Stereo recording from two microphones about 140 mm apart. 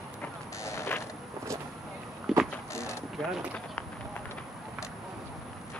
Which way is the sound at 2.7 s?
20° left (ahead or behind).